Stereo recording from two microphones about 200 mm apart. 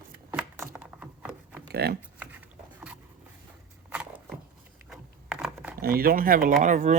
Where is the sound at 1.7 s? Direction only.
55° right (ahead or behind).